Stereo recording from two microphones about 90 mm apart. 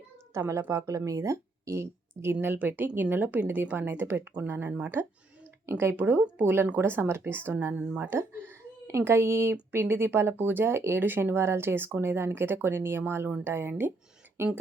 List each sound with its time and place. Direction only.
0.3 s speech: 35° right (ahead or behind)
2.3 s speech: 20° right (ahead or behind)
8.1 s speech: 30° right (ahead or behind)